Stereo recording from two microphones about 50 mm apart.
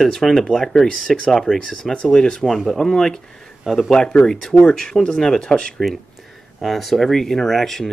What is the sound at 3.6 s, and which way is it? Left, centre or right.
Speech, centre.